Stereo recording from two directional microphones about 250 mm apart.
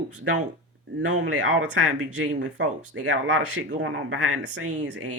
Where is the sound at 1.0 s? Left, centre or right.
Right.